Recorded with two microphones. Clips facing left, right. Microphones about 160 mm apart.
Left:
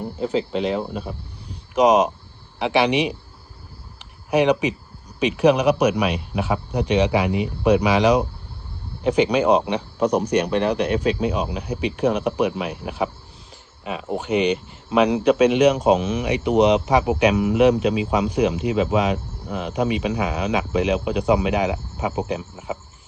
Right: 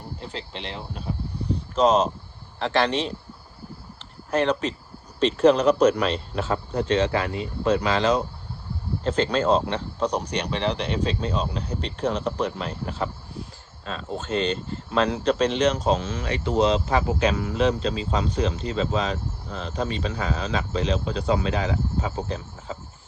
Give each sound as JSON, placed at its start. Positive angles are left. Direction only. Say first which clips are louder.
{"t": 0.7, "sound": "speech", "louder": "left 11 dB", "side_deg": 50}
{"t": 1.7, "sound": "speech", "louder": "left 4 dB", "side_deg": 15}
{"t": 3.9, "sound": "a sound", "louder": "left 5 dB", "side_deg": 15}
{"t": 5.2, "sound": "speech", "louder": "left 1 dB", "side_deg": 15}